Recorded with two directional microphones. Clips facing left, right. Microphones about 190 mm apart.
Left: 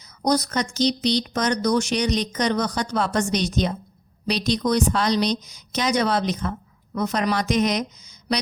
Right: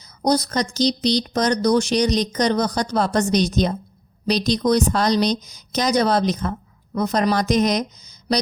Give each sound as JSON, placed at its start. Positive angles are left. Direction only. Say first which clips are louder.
{"t": 0.2, "sound": "a woman's voice", "louder": "right 2 dB", "side_deg": -30}